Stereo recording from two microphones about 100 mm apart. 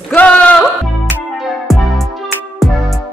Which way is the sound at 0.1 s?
15° left (ahead or behind).